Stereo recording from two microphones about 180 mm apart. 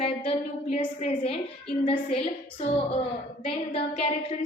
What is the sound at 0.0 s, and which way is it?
A woman's voice, 30° left (ahead or behind).